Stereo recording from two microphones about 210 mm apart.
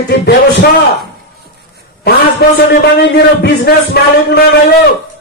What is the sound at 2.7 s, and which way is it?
A man's voice, 50° left (ahead or behind).